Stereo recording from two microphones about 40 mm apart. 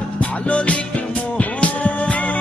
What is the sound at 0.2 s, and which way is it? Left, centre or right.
Music, left.